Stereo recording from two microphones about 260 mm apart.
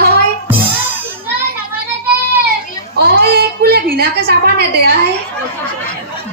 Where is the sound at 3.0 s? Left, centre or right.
Right.